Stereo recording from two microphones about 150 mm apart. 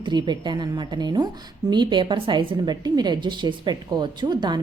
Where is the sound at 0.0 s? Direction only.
30° right (ahead or behind).